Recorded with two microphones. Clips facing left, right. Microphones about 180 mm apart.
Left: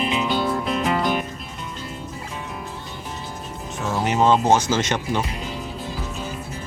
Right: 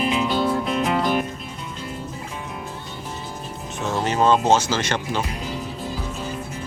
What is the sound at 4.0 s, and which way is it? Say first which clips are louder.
Music: left 1 dB; 15° left (ahead or behind).